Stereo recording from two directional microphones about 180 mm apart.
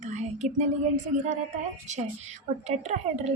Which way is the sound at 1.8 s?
40° right (ahead or behind).